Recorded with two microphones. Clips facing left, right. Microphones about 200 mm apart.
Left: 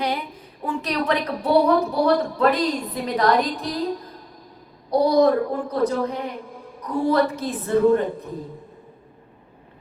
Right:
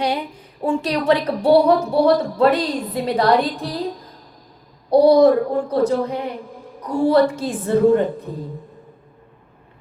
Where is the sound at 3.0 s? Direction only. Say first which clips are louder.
Right 3 dB; 30° right (ahead or behind).